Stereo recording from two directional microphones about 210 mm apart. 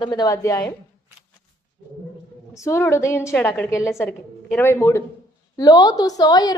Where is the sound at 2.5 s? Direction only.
15° left (ahead or behind).